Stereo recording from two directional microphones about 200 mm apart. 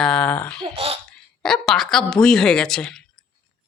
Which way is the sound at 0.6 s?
30° right (ahead or behind).